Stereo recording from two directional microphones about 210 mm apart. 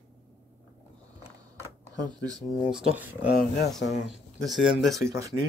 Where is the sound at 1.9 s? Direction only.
15° right (ahead or behind).